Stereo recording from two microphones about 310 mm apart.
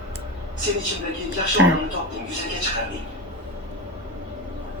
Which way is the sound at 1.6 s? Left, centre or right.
Right.